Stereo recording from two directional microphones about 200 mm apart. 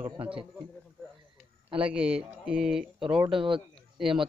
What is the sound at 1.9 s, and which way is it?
Speech, 5° right (ahead or behind).